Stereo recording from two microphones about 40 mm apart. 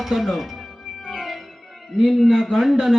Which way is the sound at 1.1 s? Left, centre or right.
Centre.